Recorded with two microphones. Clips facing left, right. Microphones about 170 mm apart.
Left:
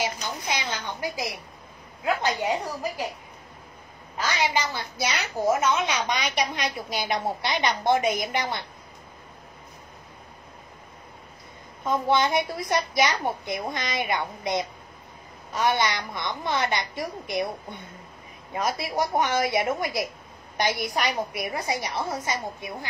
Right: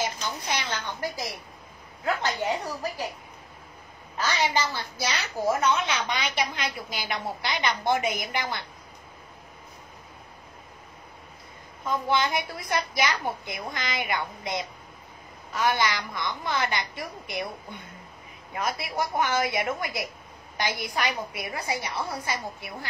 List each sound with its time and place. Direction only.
0.5 s a woman's voice: 10° left (ahead or behind)
4.6 s a woman's voice: 15° left (ahead or behind)
11.8 s a woman's voice: 25° left (ahead or behind)
18.5 s a woman's voice: 25° left (ahead or behind)